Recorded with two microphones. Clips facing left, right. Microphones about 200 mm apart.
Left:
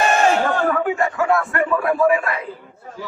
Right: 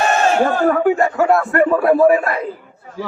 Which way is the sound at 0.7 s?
40° right (ahead or behind).